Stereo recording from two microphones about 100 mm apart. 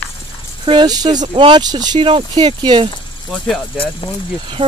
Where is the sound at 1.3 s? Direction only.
55° right (ahead or behind).